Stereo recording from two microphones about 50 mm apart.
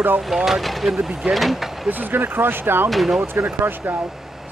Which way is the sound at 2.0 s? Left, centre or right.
Right.